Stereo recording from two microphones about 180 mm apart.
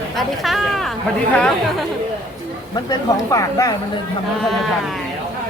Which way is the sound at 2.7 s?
20° left (ahead or behind).